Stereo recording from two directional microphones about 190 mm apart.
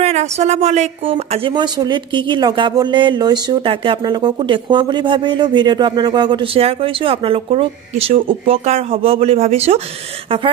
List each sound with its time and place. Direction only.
0.0 s a woman's voice: 35° right (ahead or behind)